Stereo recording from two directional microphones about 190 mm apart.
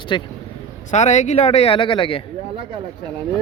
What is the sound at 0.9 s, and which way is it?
Speech, 35° left (ahead or behind).